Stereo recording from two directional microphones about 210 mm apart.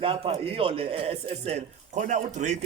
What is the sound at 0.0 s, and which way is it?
A man's voice, 25° right (ahead or behind).